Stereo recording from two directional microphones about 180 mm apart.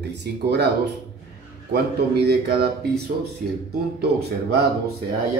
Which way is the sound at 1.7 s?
65° right (ahead or behind).